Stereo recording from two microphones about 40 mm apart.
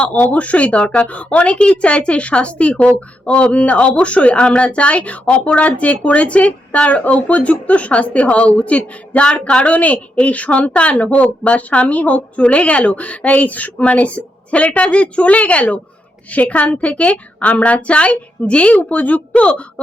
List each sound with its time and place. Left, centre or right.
0.0 s a woman's voice: left
18.7 s a woman's voice: left